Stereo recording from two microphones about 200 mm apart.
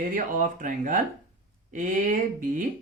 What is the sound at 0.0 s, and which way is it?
Speech, 45° right (ahead or behind).